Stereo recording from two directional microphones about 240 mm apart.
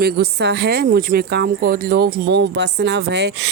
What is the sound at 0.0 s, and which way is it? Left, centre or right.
A woman's voice, right.